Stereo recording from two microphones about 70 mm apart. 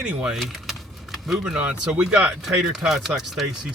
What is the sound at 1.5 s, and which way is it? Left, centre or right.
Speech, centre.